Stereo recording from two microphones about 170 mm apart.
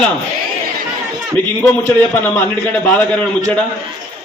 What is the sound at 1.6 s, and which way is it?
A man's voice, 10° left (ahead or behind).